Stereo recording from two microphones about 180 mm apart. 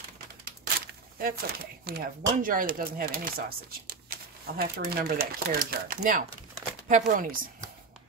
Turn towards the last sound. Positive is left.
turn(degrees=-50)  # may be behind; listen again after turning